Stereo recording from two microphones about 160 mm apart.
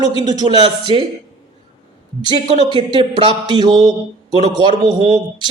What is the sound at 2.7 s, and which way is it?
A man's voice, 30° right (ahead or behind).